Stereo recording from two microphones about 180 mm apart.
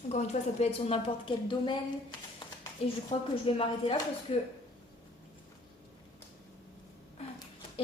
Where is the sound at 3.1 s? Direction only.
30° left (ahead or behind).